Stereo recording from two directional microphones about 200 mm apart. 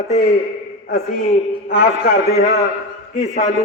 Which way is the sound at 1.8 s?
50° left (ahead or behind).